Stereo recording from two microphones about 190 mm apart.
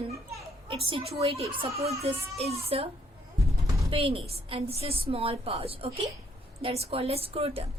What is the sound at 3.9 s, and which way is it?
A woman's voice, 30° right (ahead or behind).